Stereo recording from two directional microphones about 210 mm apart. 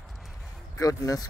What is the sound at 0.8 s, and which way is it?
Speech, 15° left (ahead or behind).